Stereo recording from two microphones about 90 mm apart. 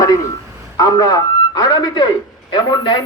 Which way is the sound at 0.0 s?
40° left (ahead or behind).